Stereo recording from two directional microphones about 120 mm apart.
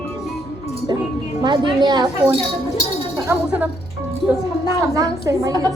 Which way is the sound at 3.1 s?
20° right (ahead or behind).